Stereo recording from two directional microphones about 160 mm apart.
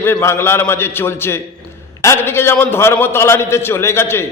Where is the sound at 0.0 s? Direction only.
15° left (ahead or behind).